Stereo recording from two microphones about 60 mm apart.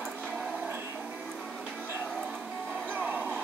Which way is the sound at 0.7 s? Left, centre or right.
Right.